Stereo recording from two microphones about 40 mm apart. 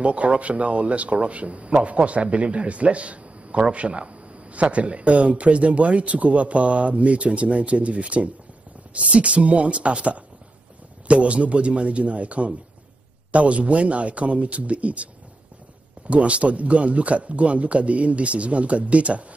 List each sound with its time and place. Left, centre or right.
0.0 s speech: right
16.1 s speech: right